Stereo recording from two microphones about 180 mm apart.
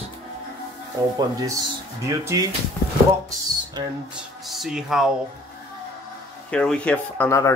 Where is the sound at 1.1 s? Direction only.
20° right (ahead or behind).